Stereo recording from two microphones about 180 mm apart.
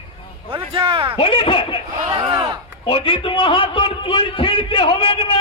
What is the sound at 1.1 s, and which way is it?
Speech, 30° left (ahead or behind).